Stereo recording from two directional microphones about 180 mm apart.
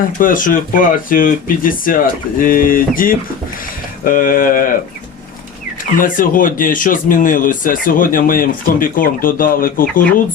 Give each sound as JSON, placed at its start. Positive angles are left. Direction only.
{"t": 0.2, "sound": "speech", "side_deg": 50}
{"t": 6.0, "sound": "speech", "side_deg": 50}